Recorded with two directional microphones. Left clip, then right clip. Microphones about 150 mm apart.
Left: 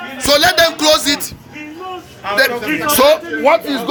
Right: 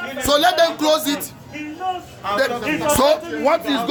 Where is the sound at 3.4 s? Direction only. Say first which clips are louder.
Left 6 dB; 15° right (ahead or behind).